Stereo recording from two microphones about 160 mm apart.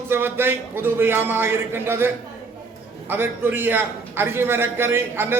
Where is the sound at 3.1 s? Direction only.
10° right (ahead or behind).